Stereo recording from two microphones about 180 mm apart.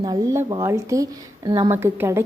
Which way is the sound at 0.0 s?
20° right (ahead or behind).